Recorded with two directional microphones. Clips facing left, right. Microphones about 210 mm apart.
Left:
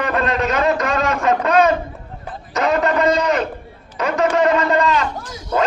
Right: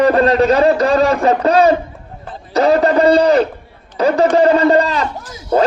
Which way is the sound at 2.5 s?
35° right (ahead or behind).